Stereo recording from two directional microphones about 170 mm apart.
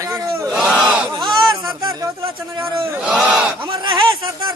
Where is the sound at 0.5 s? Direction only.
5° right (ahead or behind).